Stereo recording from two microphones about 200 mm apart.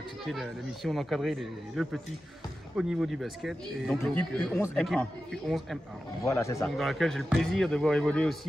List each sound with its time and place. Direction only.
0.3 s speech: centre (ahead or behind)
6.2 s a man's voice: 15° left (ahead or behind)
6.8 s speech: centre (ahead or behind)